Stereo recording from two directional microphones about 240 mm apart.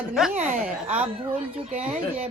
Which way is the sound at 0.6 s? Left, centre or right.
Centre.